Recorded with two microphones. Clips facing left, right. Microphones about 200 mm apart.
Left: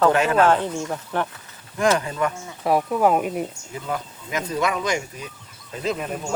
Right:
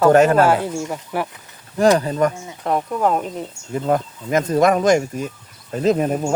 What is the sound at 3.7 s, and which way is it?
Speech, 45° right (ahead or behind).